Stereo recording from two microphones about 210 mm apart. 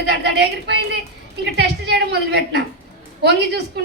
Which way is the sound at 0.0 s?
55° right (ahead or behind).